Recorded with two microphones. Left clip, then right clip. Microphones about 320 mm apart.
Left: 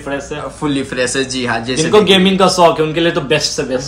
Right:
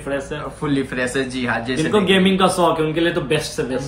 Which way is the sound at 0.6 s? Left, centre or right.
Centre.